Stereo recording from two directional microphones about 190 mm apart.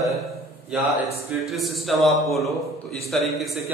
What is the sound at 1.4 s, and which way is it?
A man's voice, centre (ahead or behind).